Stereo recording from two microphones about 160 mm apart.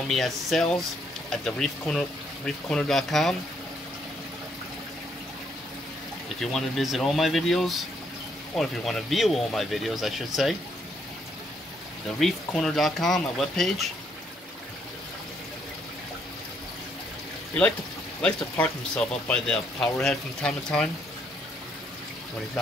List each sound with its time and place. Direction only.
0.1 s speech: centre (ahead or behind)
6.2 s speech: centre (ahead or behind)
12.2 s speech: 5° left (ahead or behind)
18.2 s speech: 5° left (ahead or behind)